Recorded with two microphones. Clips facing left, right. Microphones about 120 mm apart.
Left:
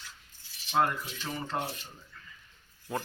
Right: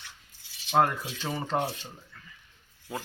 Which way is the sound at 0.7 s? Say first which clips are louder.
Right 4 dB; 65° right (ahead or behind).